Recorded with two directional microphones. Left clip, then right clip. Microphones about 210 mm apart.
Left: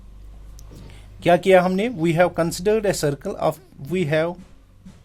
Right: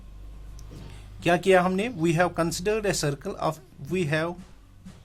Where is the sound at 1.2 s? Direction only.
25° left (ahead or behind).